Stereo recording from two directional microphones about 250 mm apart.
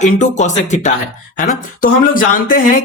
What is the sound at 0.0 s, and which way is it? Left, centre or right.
Speech, left.